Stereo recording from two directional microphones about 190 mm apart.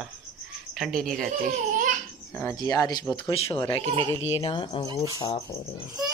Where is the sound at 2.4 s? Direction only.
15° left (ahead or behind).